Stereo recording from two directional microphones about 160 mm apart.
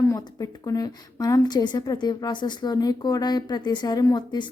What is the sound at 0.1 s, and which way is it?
Speech, 20° left (ahead or behind).